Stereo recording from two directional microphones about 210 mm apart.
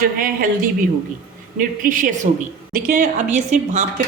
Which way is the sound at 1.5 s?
40° right (ahead or behind).